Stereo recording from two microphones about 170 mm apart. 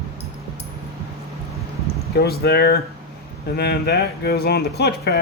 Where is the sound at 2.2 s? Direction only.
70° left (ahead or behind).